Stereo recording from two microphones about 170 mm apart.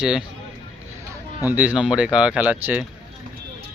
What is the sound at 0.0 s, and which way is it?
Speech, 5° right (ahead or behind).